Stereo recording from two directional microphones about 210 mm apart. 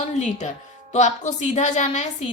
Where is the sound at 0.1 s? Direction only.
35° left (ahead or behind).